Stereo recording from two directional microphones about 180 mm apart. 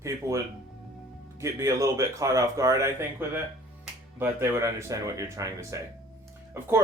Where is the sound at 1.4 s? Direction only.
15° right (ahead or behind).